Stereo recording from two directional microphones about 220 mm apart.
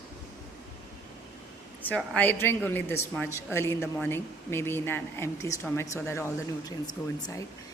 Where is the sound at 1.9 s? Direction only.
5° left (ahead or behind).